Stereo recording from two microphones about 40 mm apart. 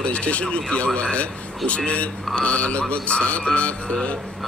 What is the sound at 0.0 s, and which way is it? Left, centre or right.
Speech, left.